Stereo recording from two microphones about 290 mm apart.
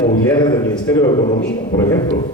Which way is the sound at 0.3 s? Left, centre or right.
Centre.